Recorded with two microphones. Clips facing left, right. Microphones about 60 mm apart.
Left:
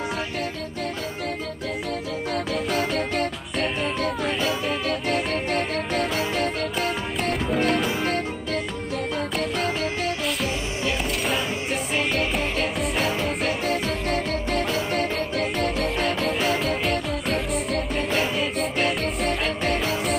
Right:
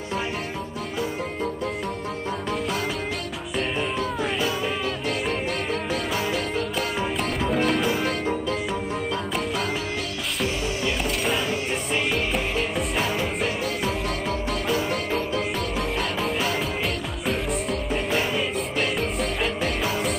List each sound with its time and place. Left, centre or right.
7.4 s music: centre
15.3 s music: left
16.2 s music: centre